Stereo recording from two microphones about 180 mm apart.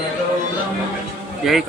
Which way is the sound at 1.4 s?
Centre (ahead or behind).